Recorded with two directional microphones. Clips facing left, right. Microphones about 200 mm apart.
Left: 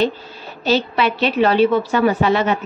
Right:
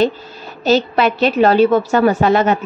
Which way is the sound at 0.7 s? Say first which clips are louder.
Right 4 dB; 45° right (ahead or behind).